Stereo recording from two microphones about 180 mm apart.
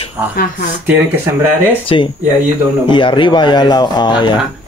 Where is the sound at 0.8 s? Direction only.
10° right (ahead or behind).